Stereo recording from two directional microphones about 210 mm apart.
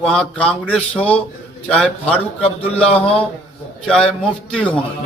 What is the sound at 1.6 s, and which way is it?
Speech, 5° left (ahead or behind).